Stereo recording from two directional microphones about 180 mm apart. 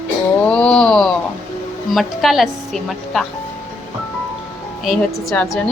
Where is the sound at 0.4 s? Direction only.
5° left (ahead or behind).